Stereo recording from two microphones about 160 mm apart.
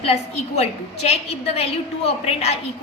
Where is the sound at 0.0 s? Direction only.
40° left (ahead or behind).